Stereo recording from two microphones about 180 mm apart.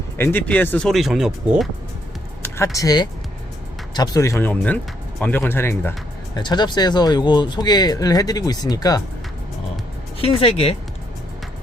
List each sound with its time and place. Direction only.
0.2 s speech: 10° left (ahead or behind)
2.7 s speech: 20° left (ahead or behind)
6.3 s speech: 25° left (ahead or behind)
10.2 s speech: 30° left (ahead or behind)